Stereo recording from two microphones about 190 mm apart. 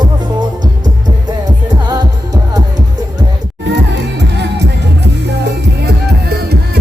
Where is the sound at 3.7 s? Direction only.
65° right (ahead or behind).